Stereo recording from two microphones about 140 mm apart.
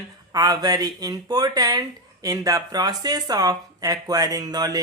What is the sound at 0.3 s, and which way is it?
Speech, 25° right (ahead or behind).